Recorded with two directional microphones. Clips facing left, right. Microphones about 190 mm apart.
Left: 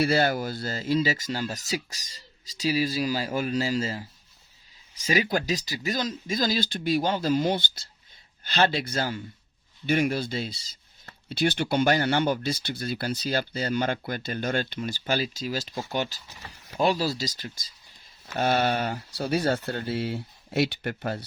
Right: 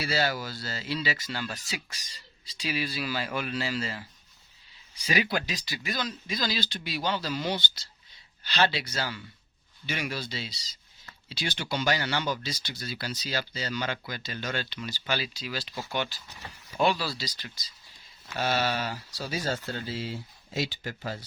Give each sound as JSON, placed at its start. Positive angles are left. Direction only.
{"t": 0.0, "sound": "speech", "side_deg": 55}